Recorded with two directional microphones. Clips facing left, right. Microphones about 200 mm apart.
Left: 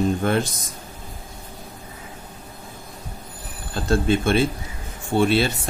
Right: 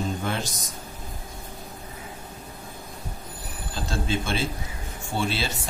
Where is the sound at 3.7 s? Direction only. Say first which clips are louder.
Left 8 dB; 55° left (ahead or behind).